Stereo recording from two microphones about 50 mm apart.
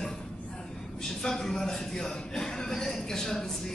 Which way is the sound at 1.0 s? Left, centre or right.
Centre.